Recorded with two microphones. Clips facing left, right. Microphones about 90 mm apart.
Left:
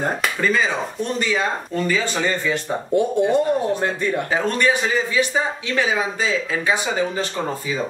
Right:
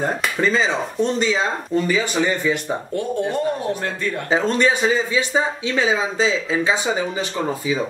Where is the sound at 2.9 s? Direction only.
15° left (ahead or behind).